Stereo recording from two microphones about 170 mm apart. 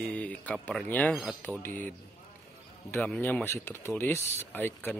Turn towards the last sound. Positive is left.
turn(degrees=10)  # may be behind; listen again after turning